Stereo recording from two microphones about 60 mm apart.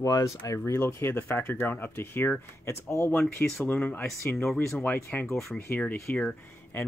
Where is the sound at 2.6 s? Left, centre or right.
Left.